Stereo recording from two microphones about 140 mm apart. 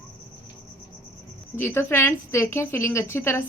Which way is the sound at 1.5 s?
15° left (ahead or behind).